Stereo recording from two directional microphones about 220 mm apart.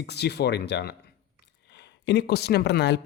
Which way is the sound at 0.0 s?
50° left (ahead or behind).